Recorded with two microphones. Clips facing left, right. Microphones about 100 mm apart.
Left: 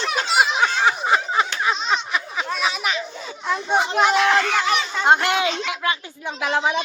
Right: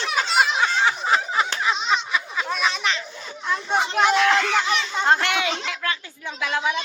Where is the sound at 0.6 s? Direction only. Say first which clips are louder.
Left 2 dB; 25° left (ahead or behind).